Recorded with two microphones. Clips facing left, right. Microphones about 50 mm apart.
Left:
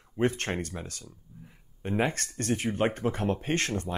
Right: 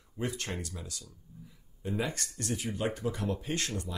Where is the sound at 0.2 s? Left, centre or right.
Left.